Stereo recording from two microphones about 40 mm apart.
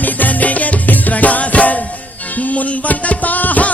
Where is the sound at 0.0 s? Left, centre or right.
Left.